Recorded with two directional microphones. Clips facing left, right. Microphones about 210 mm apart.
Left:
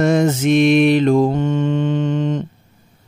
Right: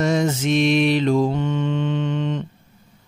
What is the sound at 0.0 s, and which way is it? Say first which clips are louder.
Mantra: left 5 dB; 55° left (ahead or behind).